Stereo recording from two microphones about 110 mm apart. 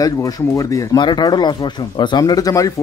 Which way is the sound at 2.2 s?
35° left (ahead or behind).